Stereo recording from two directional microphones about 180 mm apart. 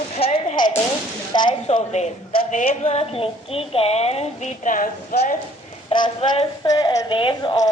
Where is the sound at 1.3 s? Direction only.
25° left (ahead or behind); by 5.3 s 45° left (ahead or behind).